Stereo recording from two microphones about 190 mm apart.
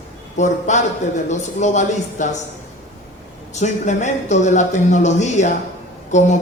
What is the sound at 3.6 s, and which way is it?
A man's voice, 40° left (ahead or behind).